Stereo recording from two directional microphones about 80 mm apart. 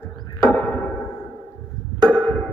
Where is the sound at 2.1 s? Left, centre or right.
Centre.